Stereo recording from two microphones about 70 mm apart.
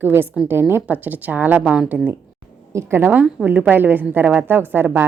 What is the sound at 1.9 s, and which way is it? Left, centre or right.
Speech, right.